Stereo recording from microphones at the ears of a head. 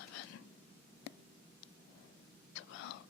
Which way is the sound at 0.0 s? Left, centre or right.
Left.